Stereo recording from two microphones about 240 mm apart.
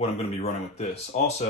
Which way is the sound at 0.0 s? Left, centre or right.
Left.